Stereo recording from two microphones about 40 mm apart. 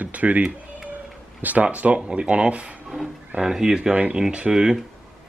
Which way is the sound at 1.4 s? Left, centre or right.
Right.